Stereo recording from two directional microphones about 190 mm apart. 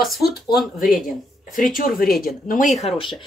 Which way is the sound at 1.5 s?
45° left (ahead or behind).